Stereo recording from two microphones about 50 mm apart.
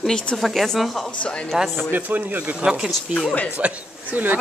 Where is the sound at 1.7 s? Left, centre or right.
Right.